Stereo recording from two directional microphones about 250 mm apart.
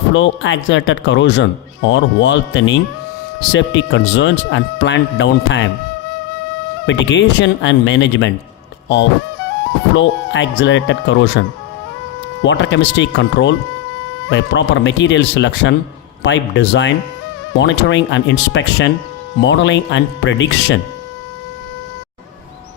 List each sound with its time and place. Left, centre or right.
0.1 s speech: left
6.8 s speech: left
9.9 s speech: left